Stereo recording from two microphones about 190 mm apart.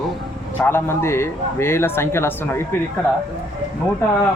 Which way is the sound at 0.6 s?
10° left (ahead or behind).